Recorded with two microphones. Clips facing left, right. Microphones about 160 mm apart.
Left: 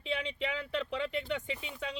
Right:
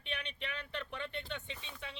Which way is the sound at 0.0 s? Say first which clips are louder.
Left 8 dB; 90° left.